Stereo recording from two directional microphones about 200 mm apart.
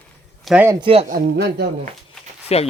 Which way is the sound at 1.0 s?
50° right (ahead or behind).